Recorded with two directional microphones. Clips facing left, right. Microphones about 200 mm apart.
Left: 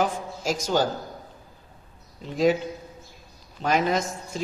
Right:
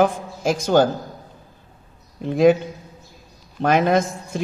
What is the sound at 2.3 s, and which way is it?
Speech, 55° right (ahead or behind).